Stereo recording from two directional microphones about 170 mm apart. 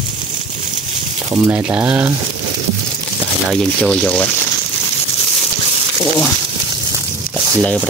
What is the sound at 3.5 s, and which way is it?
Speech, 5° left (ahead or behind).